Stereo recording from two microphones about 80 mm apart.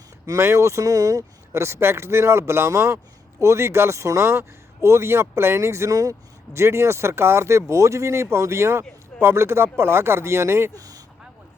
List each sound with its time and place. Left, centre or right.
0.3 s speech: right
10.8 s speech: right